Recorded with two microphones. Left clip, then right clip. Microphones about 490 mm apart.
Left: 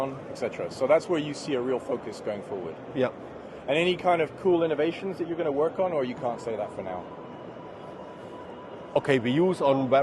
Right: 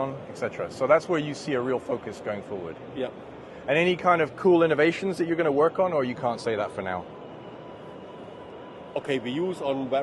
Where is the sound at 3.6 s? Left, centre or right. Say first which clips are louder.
Right 2 dB; right.